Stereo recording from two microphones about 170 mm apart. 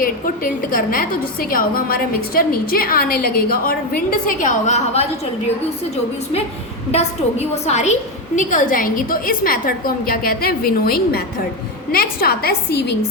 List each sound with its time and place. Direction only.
0.0 s a woman's voice: 55° left (ahead or behind)
6.9 s a woman's voice: 40° left (ahead or behind); by 13.0 s 70° left (ahead or behind)